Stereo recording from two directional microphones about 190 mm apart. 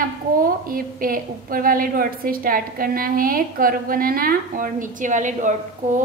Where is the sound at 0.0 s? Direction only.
50° right (ahead or behind).